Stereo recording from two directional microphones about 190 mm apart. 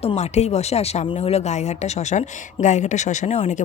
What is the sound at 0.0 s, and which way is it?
Speech, 35° left (ahead or behind).